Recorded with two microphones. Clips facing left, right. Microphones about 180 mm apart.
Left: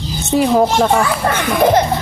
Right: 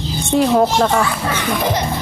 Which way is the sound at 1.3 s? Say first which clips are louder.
Left 6 dB; 55° left (ahead or behind).